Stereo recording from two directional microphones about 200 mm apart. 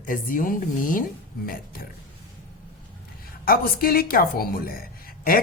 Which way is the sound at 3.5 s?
45° left (ahead or behind).